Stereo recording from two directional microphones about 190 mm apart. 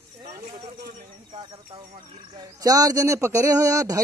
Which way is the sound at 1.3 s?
30° right (ahead or behind).